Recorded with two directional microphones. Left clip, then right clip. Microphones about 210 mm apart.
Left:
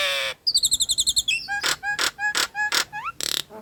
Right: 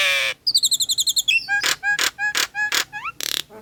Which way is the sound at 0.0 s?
15° right (ahead or behind).